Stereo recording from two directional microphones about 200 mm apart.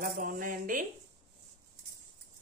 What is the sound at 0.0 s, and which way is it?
Speech, 45° right (ahead or behind).